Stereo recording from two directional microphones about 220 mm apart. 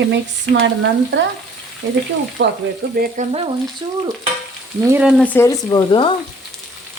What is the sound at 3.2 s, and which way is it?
Frying, 35° right (ahead or behind).